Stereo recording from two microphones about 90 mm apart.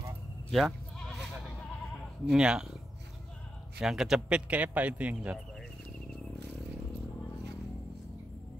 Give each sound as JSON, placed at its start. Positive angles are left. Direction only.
{"t": 0.5, "sound": "goat", "side_deg": 0}
{"t": 2.3, "sound": "a man's voice", "side_deg": -10}
{"t": 3.8, "sound": "a man's voice", "side_deg": -5}